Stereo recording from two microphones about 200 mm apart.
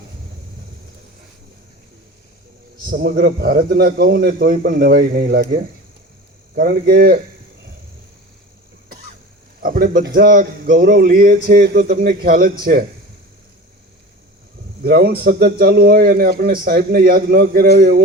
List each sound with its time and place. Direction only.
2.8 s a man's voice: 50° right (ahead or behind)
9.6 s a man's voice: 45° right (ahead or behind)
14.8 s a man's voice: 50° right (ahead or behind)